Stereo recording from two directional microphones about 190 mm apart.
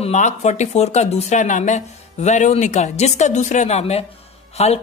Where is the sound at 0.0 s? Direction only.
35° left (ahead or behind).